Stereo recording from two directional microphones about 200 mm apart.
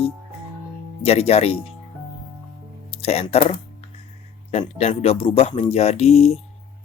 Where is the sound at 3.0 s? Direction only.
30° left (ahead or behind).